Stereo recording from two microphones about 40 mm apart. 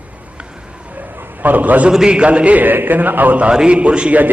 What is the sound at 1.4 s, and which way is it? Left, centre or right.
Speech, right.